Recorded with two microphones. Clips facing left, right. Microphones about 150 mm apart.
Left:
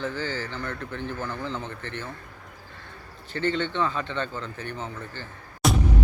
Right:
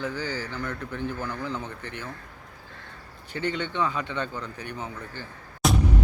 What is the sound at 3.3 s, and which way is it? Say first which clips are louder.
Speech: left 2 dB; 10° right (ahead or behind).